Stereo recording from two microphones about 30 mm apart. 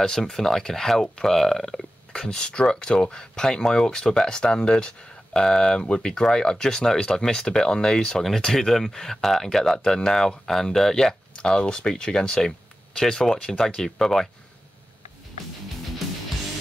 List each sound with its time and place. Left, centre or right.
0.0 s speech: centre
2.1 s speech: left
8.5 s speech: centre
11.3 s speech: left; by 14.3 s centre